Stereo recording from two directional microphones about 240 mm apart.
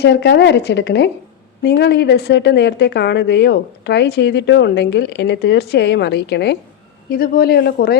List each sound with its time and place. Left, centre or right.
0.0 s a woman's voice: left